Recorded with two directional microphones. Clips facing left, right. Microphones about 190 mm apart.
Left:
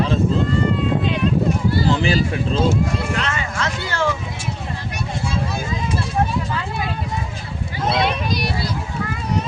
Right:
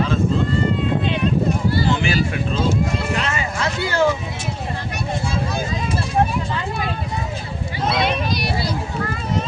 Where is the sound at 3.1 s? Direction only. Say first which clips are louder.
Right 1 dB; 10° right (ahead or behind).